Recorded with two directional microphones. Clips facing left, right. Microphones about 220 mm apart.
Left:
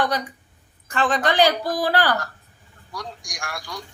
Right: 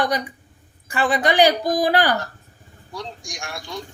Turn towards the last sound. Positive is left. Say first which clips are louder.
# right 2 dB
turn(degrees=-25)  # may be behind; listen again after turning